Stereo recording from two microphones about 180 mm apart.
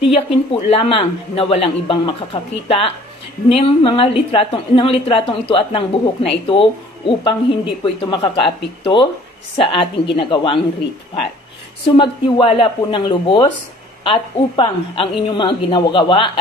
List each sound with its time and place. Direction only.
0.1 s a man's voice: 30° left (ahead or behind)
11.8 s a woman's voice: 30° left (ahead or behind)